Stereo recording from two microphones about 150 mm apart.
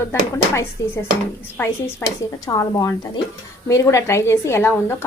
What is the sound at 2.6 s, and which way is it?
A woman's voice, 25° left (ahead or behind).